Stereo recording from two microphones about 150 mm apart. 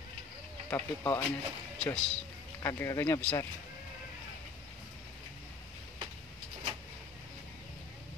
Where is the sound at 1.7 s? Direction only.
5° left (ahead or behind).